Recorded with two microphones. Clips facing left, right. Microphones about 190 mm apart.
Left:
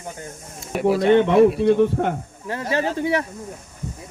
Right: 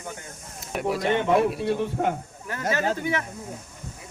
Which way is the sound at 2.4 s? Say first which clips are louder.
Left 3 dB; 30° left (ahead or behind).